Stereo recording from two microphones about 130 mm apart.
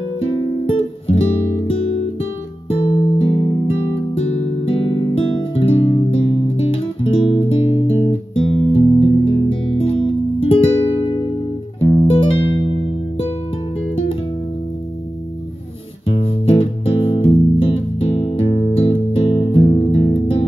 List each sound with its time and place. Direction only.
0.7 s music: 45° left (ahead or behind)
2.7 s music: 45° left (ahead or behind)
16.1 s music: 50° left (ahead or behind)